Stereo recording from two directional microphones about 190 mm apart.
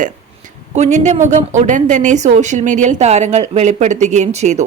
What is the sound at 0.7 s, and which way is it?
Speech, 40° right (ahead or behind).